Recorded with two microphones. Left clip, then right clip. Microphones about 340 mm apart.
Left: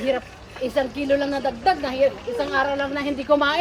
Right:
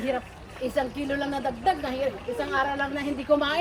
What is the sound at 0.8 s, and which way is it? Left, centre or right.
A woman's voice, centre.